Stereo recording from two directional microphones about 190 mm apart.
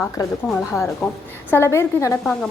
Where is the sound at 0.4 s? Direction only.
10° left (ahead or behind).